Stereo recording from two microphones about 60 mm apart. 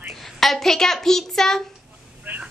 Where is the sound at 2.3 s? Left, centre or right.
Right.